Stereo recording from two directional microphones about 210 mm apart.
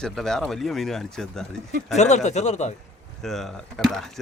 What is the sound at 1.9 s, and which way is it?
Speech, 35° left (ahead or behind).